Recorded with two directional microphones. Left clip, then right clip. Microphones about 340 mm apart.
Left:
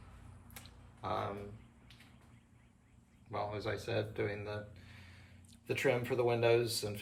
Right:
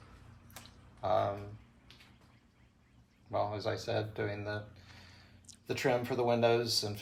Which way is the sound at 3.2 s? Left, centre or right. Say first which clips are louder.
Right 5 dB; right.